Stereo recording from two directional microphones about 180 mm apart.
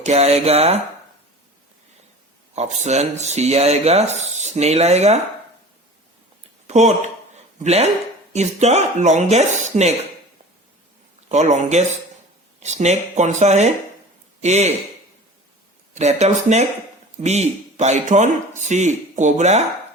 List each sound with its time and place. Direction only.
0.0 s speech: 35° right (ahead or behind)
2.6 s speech: 40° right (ahead or behind)
6.7 s speech: 40° right (ahead or behind)
7.3 s a sound: 35° right (ahead or behind)
8.3 s speech: 40° right (ahead or behind)
11.3 s speech: 40° right (ahead or behind)
16.0 s speech: 40° right (ahead or behind)